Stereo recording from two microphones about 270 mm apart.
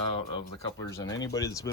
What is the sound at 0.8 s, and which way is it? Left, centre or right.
Speech, centre.